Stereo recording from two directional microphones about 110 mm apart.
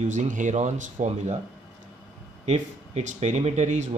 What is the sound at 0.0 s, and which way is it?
Speech, 90° right.